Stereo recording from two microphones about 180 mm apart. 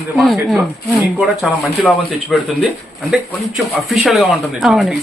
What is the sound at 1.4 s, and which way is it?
Speech, centre (ahead or behind).